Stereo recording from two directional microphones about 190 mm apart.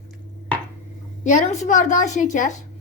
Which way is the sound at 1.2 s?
40° left (ahead or behind).